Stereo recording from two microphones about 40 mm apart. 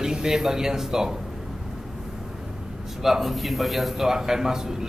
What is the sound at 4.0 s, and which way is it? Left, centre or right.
Speech, centre.